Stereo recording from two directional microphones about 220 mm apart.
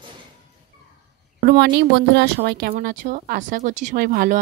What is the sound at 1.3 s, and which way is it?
Speech, 45° right (ahead or behind).